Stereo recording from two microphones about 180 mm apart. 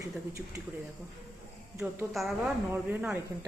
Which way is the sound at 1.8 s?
Centre (ahead or behind).